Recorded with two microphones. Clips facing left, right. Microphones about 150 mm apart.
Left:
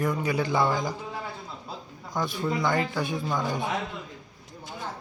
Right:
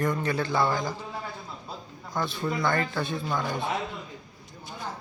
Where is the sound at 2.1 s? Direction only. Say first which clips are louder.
Left 1 dB; 15° left (ahead or behind).